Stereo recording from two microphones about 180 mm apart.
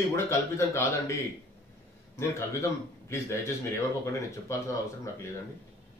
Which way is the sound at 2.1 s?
15° left (ahead or behind).